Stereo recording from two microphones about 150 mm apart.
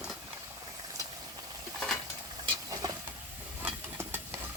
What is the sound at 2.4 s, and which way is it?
Stir, 25° right (ahead or behind).